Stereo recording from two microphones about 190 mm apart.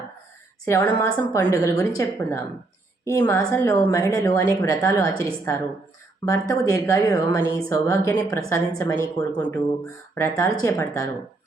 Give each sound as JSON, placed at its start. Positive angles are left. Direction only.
{"t": 0.6, "sound": "a woman's voice", "side_deg": 15}